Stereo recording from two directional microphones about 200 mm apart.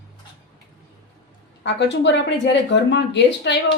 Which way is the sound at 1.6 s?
60° left (ahead or behind).